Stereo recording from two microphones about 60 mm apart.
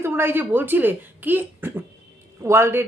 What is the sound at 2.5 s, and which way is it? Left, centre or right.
Speech, right.